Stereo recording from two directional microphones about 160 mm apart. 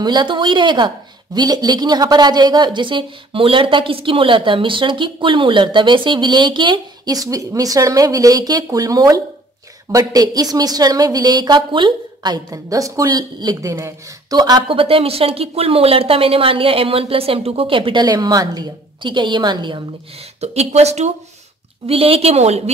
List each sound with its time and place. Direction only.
0.0 s a woman's voice: 30° right (ahead or behind)